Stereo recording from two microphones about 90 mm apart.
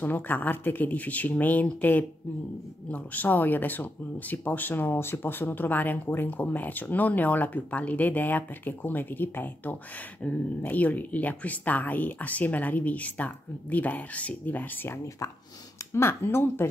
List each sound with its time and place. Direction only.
0.0 s speech: 20° left (ahead or behind)